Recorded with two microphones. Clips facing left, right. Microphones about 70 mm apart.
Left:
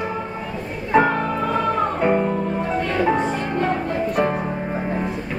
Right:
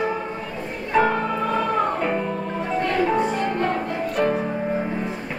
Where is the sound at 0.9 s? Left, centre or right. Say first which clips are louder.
Left 2 dB; centre.